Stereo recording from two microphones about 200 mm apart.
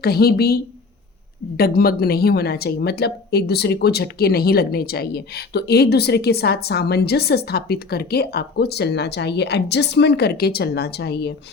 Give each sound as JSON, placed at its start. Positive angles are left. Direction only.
{"t": 0.0, "sound": "speech", "side_deg": 50}